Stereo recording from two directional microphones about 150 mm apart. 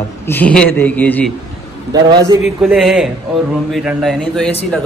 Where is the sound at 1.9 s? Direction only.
25° right (ahead or behind).